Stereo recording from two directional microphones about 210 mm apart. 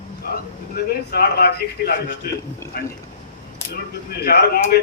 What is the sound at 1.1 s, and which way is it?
A man's voice, 50° left (ahead or behind).